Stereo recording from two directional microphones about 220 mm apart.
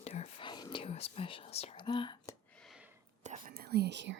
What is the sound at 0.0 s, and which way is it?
Whispering, 30° left (ahead or behind).